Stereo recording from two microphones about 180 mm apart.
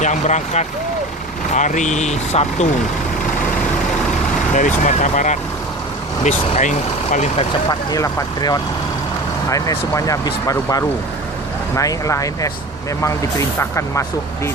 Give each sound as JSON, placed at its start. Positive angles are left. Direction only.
{"t": 0.0, "sound": "speech", "side_deg": 40}
{"t": 4.5, "sound": "speech", "side_deg": 45}
{"t": 7.7, "sound": "speech", "side_deg": 20}
{"t": 13.6, "sound": "speech", "side_deg": 15}